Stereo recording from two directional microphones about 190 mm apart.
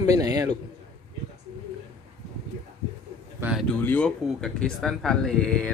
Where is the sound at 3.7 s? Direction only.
5° left (ahead or behind).